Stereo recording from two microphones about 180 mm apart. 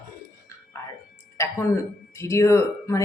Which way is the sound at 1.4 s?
15° left (ahead or behind).